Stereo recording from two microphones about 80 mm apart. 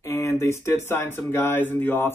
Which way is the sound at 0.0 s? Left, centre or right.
Left.